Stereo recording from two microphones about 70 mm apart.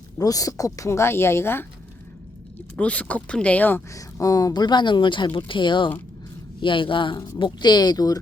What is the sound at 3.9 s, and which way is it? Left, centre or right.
A woman's voice, left.